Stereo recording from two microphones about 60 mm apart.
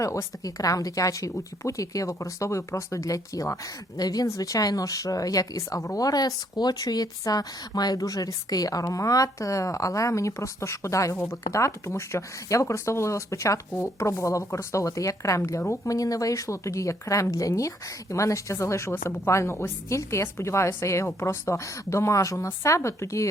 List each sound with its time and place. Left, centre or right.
0.0 s speech: left
2.1 s speech: left
3.9 s speech: left
4.3 s speech: left
15.9 s a woman's voice: left